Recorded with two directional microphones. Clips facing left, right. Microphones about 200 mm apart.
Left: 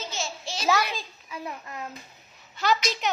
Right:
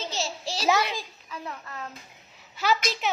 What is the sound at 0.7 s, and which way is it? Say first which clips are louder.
Speech: even; 15° right (ahead or behind).